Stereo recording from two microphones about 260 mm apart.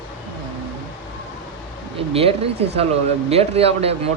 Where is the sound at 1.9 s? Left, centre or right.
Right.